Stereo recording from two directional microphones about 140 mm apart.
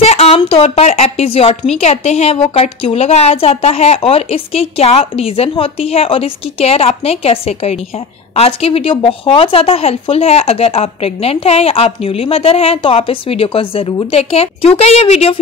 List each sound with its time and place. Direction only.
0.0 s a woman's voice: 50° left (ahead or behind)